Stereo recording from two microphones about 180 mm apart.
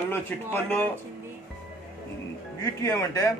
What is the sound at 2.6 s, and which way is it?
Speech, 20° left (ahead or behind).